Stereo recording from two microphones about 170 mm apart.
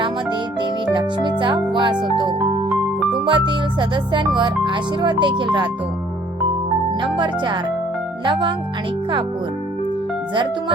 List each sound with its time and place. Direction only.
0.0 s music: 30° right (ahead or behind)
2.7 s music: centre (ahead or behind)
3.2 s speech: 30° right (ahead or behind)
7.0 s speech: 30° right (ahead or behind)